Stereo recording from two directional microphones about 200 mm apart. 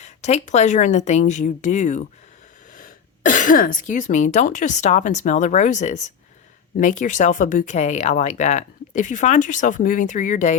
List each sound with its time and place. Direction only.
0.0 s speech: 35° left (ahead or behind)